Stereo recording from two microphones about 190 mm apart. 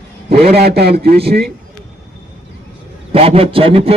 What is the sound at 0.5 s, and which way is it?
Speech, 60° right (ahead or behind).